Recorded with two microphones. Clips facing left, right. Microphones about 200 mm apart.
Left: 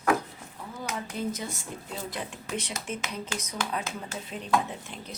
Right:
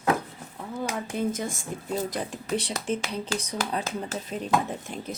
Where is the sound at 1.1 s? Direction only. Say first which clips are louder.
Right 5 dB; 50° right (ahead or behind).